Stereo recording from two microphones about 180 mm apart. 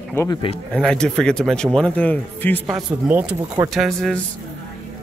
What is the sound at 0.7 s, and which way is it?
Speech, 5° left (ahead or behind).